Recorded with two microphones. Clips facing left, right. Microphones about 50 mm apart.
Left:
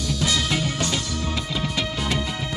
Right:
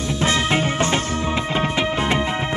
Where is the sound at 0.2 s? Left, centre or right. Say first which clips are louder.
Right 5 dB; right.